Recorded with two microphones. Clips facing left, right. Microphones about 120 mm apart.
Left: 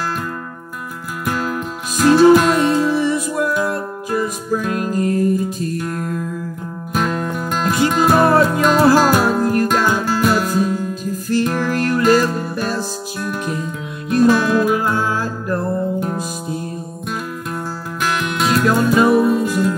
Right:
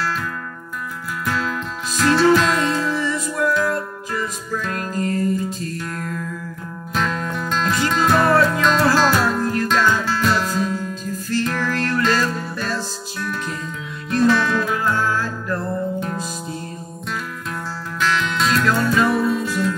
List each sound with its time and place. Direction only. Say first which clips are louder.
1.2 s music: left 3 dB; 15° left (ahead or behind)
18.0 s music: left 1 dB; 15° left (ahead or behind)